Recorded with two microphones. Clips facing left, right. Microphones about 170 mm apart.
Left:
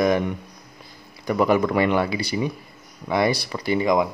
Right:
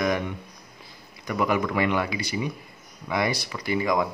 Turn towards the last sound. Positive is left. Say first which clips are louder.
# left 4 dB
turn(degrees=25)  # may be behind; listen again after turning